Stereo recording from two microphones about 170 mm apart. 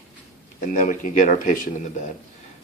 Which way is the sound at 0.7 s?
50° left (ahead or behind).